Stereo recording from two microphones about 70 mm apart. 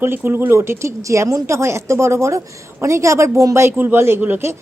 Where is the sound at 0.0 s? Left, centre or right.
Right.